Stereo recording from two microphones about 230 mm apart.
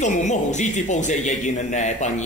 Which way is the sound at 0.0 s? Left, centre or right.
Left.